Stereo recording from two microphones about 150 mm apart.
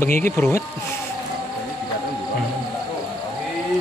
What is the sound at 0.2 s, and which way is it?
Speech, 15° left (ahead or behind).